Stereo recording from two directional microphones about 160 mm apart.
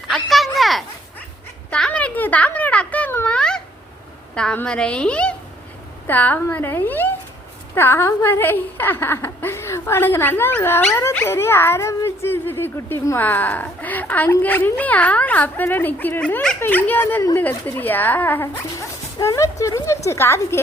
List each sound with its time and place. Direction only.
0.1 s speech: centre (ahead or behind)
1.7 s a sound: 5° left (ahead or behind)
4.4 s a woman's voice: 5° left (ahead or behind)